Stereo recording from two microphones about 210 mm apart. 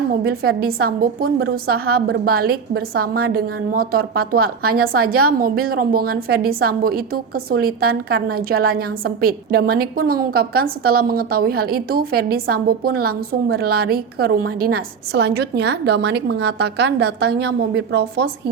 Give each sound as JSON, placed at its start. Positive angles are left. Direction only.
{"t": 0.3, "sound": "a woman's voice", "side_deg": -45}